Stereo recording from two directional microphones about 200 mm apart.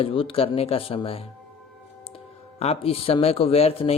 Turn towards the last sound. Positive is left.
turn(degrees=30)  # may be behind; listen again after turning